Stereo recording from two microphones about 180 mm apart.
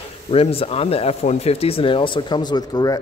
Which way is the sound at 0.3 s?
35° left (ahead or behind).